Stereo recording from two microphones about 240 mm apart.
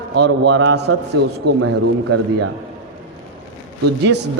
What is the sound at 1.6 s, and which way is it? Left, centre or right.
Speech, right.